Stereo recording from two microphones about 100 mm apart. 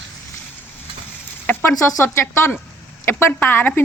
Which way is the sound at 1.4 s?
20° left (ahead or behind).